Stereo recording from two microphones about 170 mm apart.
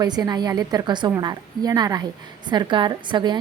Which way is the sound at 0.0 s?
25° right (ahead or behind).